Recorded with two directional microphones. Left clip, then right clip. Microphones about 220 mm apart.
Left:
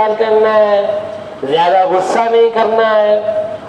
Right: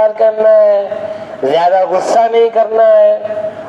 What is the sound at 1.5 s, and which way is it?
A man's voice, 35° right (ahead or behind).